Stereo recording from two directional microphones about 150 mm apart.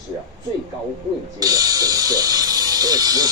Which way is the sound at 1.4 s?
25° right (ahead or behind).